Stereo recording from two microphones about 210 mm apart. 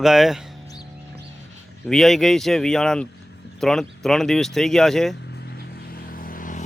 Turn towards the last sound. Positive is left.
turn(degrees=40)  # may be behind; listen again after turning